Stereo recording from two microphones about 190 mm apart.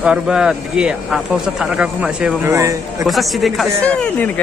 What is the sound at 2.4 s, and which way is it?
Speech, 15° right (ahead or behind).